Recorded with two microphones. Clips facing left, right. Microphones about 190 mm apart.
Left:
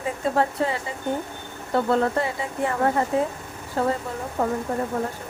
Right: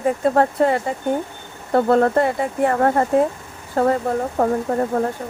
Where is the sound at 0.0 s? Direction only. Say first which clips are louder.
Right 6 dB; 55° right (ahead or behind).